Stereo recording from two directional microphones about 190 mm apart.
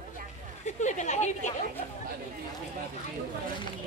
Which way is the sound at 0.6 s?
40° left (ahead or behind).